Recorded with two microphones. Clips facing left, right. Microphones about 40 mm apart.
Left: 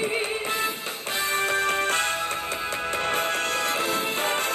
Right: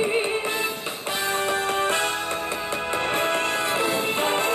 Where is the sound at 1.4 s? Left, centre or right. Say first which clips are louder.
Left 1 dB; left.